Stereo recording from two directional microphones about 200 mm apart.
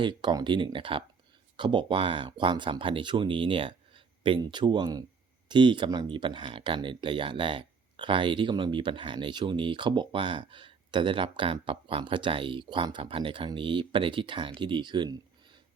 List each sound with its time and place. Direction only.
0.0 s speech: 20° right (ahead or behind)